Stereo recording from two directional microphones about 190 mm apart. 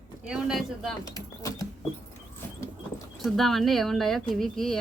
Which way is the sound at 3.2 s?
Centre (ahead or behind).